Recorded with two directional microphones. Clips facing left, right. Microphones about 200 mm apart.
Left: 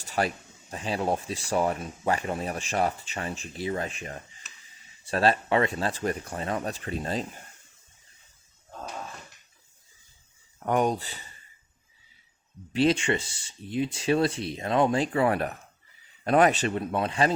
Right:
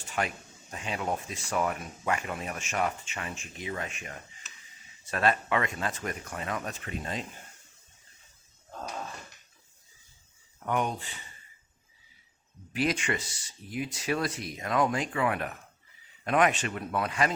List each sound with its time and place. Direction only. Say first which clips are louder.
0.0 s speech: left 4 dB; 35° left (ahead or behind)
10.7 s speech: left 5 dB; 40° left (ahead or behind)
12.7 s speech: left 6 dB; 30° left (ahead or behind)